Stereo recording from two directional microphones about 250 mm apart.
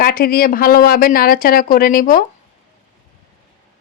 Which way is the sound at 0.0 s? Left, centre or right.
Left.